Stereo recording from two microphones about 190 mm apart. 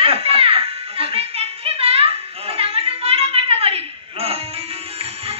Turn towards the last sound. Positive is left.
turn(degrees=-30)  # may be behind; listen again after turning